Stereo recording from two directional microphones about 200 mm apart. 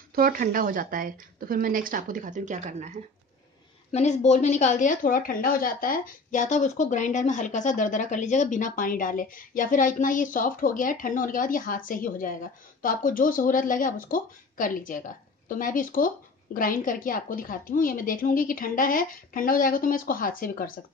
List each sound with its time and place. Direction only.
0.1 s a woman's voice: 45° right (ahead or behind)
3.9 s a woman's voice: 35° left (ahead or behind)